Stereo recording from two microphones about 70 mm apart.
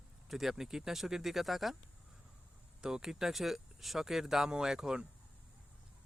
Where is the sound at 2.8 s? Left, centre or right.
Centre.